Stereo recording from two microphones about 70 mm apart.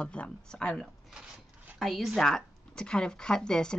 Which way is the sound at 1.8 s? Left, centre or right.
Centre.